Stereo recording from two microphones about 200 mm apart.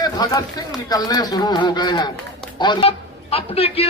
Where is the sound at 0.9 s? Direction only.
20° left (ahead or behind).